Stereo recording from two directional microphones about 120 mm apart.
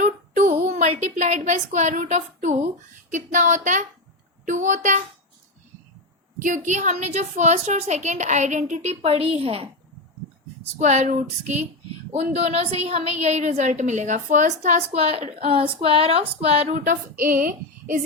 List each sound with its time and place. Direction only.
0.0 s a woman's voice: 85° right
3.1 s speech: 90° right
6.7 s a woman's voice: 85° right; by 9.6 s 55° right (ahead or behind)
10.8 s a sound: 80° right
12.1 s a woman's voice: 60° right (ahead or behind); by 14.8 s 85° right
14.9 s speech: 55° right (ahead or behind); by 17.0 s 75° right (ahead or behind)